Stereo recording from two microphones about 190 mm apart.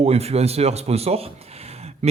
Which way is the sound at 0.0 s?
35° right (ahead or behind).